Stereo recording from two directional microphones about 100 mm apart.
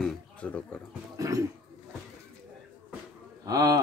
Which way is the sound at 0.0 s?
10° left (ahead or behind).